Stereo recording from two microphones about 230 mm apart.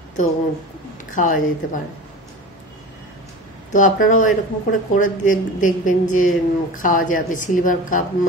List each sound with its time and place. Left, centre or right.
1.1 s speech: left
3.7 s speech: left